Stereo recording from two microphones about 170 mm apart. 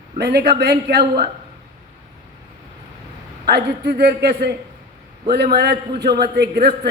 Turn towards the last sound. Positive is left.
turn(degrees=-75)  # may be behind; listen again after turning